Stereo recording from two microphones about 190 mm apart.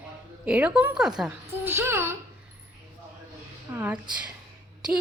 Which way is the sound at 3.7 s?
10° right (ahead or behind).